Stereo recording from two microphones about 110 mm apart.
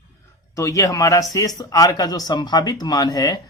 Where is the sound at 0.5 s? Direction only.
30° left (ahead or behind).